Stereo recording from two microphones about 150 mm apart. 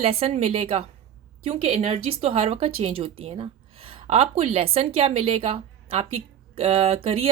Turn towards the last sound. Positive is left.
turn(degrees=-40)  # may be behind; listen again after turning